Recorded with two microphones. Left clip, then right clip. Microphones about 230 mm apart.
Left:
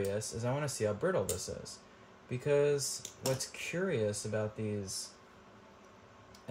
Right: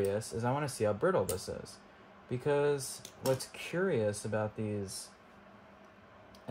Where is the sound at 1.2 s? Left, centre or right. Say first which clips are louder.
Right 2 dB; centre.